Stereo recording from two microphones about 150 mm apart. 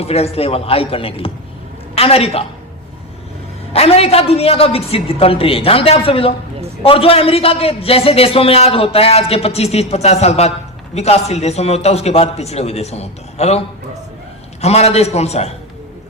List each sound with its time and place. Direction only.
0.0 s a man's voice: 40° left (ahead or behind)
3.7 s a man's voice: 40° left (ahead or behind)
14.6 s a man's voice: 45° left (ahead or behind)